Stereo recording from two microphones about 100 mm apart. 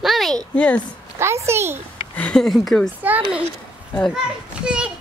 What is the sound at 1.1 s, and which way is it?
Speech, 25° right (ahead or behind).